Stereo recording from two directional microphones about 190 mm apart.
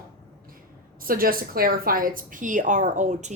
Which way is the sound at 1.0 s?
50° right (ahead or behind).